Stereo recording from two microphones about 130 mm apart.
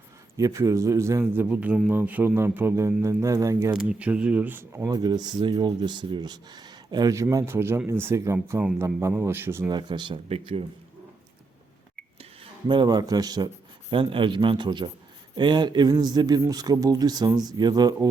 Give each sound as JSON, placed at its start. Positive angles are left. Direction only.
{"t": 0.3, "sound": "speech", "side_deg": -25}
{"t": 3.8, "sound": "speech", "side_deg": -10}
{"t": 4.9, "sound": "speech", "side_deg": -30}
{"t": 9.6, "sound": "speech", "side_deg": -35}
{"t": 10.2, "sound": "speech", "side_deg": -50}
{"t": 12.4, "sound": "speech", "side_deg": -35}
{"t": 13.9, "sound": "speech", "side_deg": -40}